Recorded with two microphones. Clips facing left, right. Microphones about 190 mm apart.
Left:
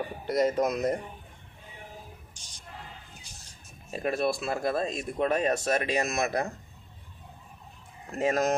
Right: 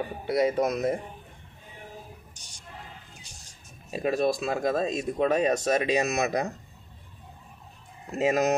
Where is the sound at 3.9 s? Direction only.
15° right (ahead or behind).